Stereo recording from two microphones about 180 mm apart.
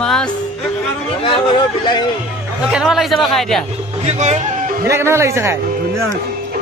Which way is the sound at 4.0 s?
40° right (ahead or behind).